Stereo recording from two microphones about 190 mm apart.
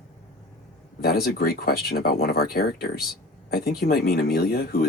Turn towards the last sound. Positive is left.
turn(degrees=55)  # may be behind; listen again after turning